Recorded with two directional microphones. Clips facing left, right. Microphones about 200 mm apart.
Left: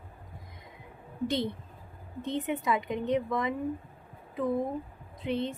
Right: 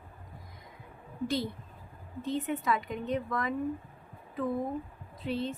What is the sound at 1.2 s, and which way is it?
A woman's voice, 20° left (ahead or behind).